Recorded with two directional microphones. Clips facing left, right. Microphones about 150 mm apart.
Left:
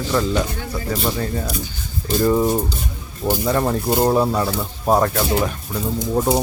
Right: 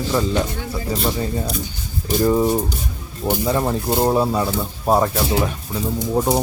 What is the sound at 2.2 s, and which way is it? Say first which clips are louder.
Speech: even; 10° right (ahead or behind).